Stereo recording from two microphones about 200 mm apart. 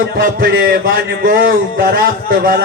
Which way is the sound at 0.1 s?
45° right (ahead or behind).